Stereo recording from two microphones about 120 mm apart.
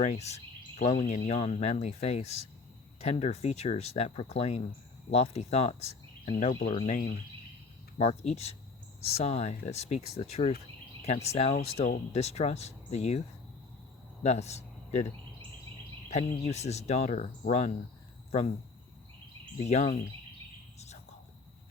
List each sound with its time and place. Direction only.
0.0 s speech: 65° left (ahead or behind); by 7.2 s 85° left
7.9 s speech: 60° left (ahead or behind)
14.3 s speech: 65° left (ahead or behind)
16.0 s cricket: 65° left (ahead or behind)
18.3 s speech: 65° left (ahead or behind)
19.6 s speech: 65° left (ahead or behind)
20.7 s whispering: 65° left (ahead or behind)